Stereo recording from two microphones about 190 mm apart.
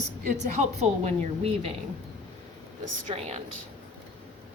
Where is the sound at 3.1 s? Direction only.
35° right (ahead or behind).